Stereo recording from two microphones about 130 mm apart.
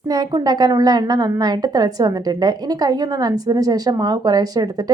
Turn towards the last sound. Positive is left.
turn(degrees=-30)  # may be behind; listen again after turning